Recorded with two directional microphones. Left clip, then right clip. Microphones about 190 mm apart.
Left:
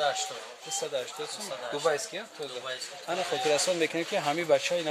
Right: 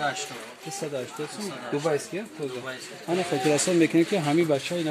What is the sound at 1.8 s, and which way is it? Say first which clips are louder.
Speech: even; centre (ahead or behind).